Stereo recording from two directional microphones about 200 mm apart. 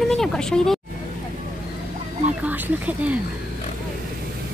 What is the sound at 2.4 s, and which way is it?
Speech, 10° right (ahead or behind).